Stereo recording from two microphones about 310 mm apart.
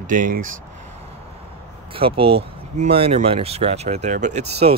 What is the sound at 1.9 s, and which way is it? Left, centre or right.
Speech, centre.